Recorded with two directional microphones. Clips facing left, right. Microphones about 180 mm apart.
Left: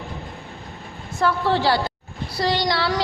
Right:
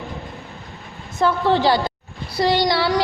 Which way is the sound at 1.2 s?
20° right (ahead or behind).